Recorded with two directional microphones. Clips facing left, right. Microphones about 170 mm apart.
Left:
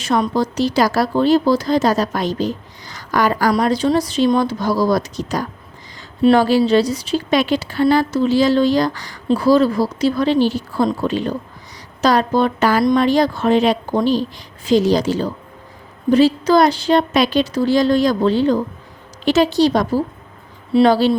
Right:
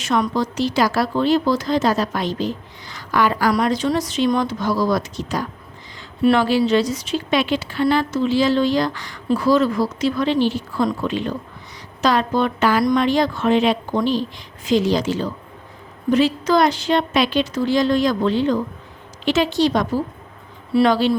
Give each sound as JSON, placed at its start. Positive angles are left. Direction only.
{"t": 0.0, "sound": "a woman's voice", "side_deg": 35}